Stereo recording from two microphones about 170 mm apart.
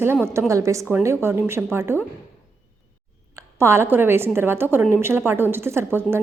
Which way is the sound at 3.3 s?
15° right (ahead or behind).